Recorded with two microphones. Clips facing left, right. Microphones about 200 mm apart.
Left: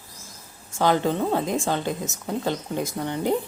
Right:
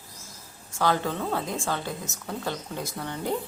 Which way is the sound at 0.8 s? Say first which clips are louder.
Left 5 dB; 20° left (ahead or behind).